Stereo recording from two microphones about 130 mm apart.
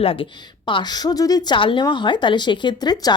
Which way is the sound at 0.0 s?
45° left (ahead or behind).